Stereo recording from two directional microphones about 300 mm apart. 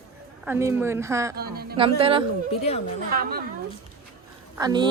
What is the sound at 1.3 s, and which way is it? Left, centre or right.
Speech, right.